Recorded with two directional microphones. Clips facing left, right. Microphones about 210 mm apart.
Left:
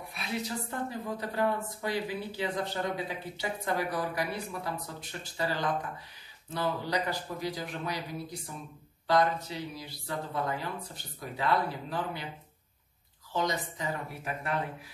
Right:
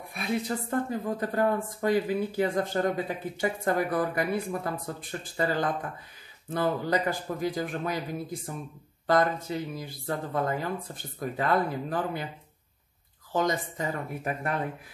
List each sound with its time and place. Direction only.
0.1 s speech: 50° right (ahead or behind)
13.3 s speech: 50° right (ahead or behind)